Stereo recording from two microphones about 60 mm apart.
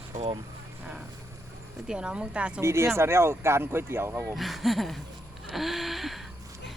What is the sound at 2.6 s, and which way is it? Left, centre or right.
Speech, right.